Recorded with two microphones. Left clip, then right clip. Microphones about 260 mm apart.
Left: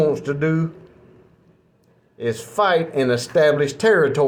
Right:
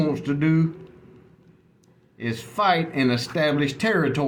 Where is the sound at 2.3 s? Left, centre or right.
Centre.